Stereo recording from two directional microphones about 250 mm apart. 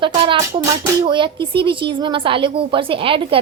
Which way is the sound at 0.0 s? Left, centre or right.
Centre.